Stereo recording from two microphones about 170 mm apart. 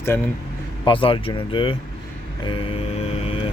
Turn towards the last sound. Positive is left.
turn(degrees=35)  # may be behind; listen again after turning